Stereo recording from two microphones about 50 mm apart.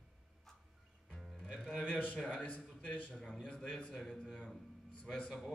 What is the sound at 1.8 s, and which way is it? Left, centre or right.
Speech, left.